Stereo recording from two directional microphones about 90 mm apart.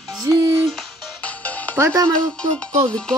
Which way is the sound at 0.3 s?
45° right (ahead or behind).